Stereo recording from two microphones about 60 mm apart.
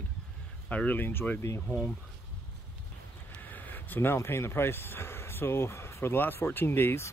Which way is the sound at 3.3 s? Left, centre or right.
Left.